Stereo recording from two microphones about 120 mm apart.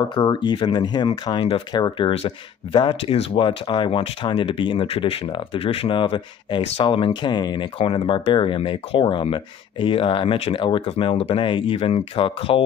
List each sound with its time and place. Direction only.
0.1 s speech: 40° left (ahead or behind)
7.8 s speech: 50° left (ahead or behind)